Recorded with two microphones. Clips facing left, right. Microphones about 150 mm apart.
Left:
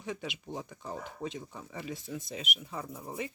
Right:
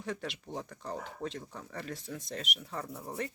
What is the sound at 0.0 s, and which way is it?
Speech, centre (ahead or behind).